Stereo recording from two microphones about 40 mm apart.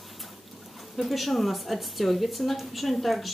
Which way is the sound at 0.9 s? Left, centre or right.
Centre.